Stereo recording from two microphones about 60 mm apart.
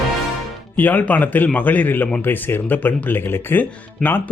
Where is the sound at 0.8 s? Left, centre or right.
Left.